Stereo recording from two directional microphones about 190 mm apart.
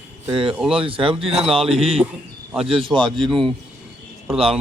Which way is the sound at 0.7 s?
30° right (ahead or behind).